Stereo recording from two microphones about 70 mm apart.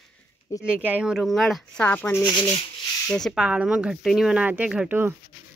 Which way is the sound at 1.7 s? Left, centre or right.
Left.